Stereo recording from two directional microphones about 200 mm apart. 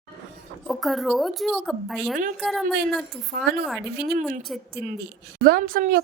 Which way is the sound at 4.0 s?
50° right (ahead or behind).